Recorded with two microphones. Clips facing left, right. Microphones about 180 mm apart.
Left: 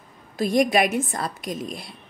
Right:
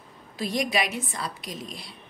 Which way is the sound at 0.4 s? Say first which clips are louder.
Left 7 dB; 50° left (ahead or behind).